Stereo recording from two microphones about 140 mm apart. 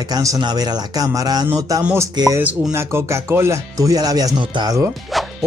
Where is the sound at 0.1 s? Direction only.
25° right (ahead or behind).